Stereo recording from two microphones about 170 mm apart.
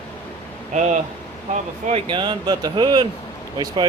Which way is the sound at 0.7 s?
45° right (ahead or behind).